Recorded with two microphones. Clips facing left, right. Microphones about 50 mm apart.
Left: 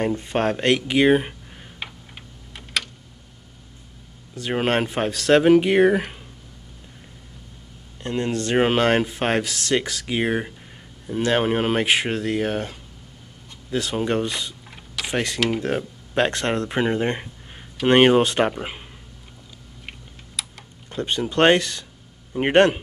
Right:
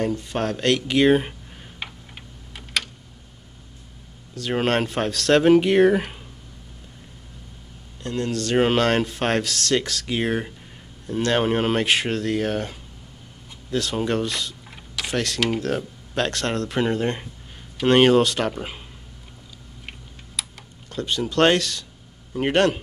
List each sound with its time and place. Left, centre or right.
0.0 s a sound: left; by 2.9 s centre
4.4 s speech: centre
8.0 s speech: left
8.6 s speech: centre
19.9 s typing: centre
20.9 s speech: left